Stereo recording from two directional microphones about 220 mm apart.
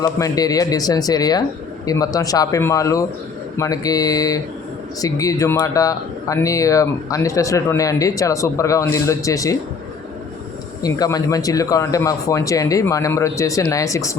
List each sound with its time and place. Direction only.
0.0 s speech: 15° left (ahead or behind)
10.8 s speech: 15° left (ahead or behind)